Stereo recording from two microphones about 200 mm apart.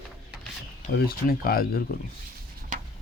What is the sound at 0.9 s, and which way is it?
Speech, 50° left (ahead or behind).